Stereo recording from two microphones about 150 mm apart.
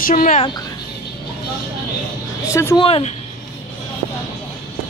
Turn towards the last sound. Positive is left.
turn(degrees=40)  # may be behind; listen again after turning